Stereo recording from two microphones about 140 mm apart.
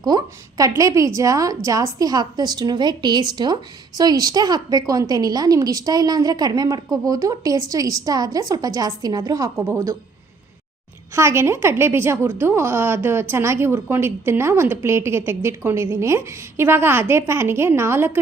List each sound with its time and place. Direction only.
0.0 s a woman's voice: 30° right (ahead or behind)
11.1 s a woman's voice: 20° right (ahead or behind)